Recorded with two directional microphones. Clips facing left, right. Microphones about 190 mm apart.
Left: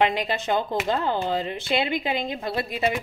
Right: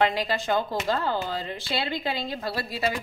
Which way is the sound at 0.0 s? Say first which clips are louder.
Left 1 dB; 20° left (ahead or behind).